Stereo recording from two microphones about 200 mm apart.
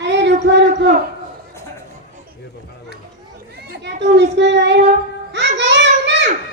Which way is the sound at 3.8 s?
60° right (ahead or behind).